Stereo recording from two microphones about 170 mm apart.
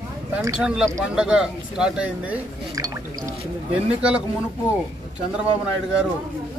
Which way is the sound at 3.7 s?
5° right (ahead or behind).